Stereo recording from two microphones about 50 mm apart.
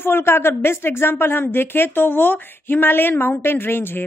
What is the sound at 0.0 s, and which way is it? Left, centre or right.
Speech, left.